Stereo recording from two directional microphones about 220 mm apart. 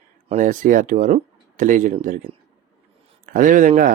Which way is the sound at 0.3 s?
35° right (ahead or behind).